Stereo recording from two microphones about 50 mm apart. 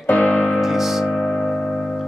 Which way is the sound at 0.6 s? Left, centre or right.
Centre.